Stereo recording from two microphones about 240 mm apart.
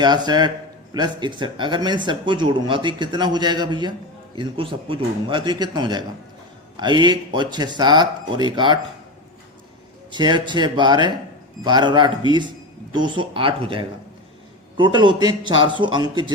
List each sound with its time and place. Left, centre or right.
0.0 s a man's voice: centre
10.1 s a man's voice: centre